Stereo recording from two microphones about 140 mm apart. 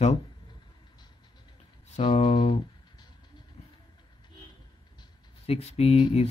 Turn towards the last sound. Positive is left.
turn(degrees=45)  # may be behind; listen again after turning